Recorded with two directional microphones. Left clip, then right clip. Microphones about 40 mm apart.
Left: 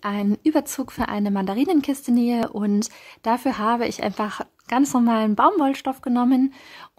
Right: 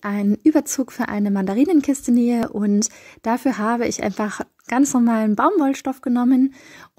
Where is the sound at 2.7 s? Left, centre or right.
Right.